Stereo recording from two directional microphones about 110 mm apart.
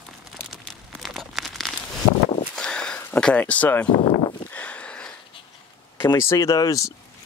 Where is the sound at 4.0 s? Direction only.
55° left (ahead or behind).